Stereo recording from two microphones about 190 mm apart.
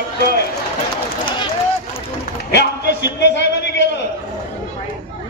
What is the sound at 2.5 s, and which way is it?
A man's voice, 65° left (ahead or behind).